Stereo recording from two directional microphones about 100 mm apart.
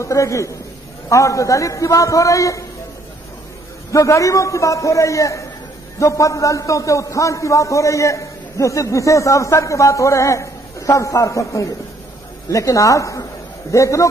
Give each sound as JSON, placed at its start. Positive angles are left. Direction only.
{"t": 0.0, "sound": "a man's voice", "side_deg": 30}
{"t": 3.9, "sound": "a man's voice", "side_deg": 30}